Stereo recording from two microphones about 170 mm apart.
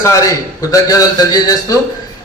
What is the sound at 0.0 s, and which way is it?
A man's voice, 20° left (ahead or behind).